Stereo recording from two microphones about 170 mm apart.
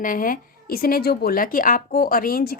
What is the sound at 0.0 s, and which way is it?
Speech, 55° left (ahead or behind).